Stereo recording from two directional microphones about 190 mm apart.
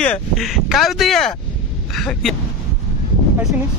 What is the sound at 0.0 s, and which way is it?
Speech, 5° left (ahead or behind).